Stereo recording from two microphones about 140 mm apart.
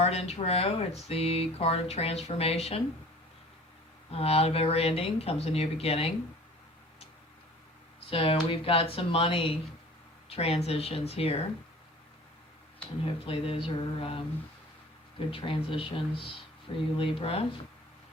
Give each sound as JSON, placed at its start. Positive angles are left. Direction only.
{"t": 0.0, "sound": "speech", "side_deg": 45}
{"t": 4.1, "sound": "speech", "side_deg": 45}
{"t": 8.1, "sound": "speech", "side_deg": 40}
{"t": 13.1, "sound": "mantra", "side_deg": 45}
{"t": 15.3, "sound": "mantra", "side_deg": 40}
{"t": 17.0, "sound": "speech", "side_deg": 45}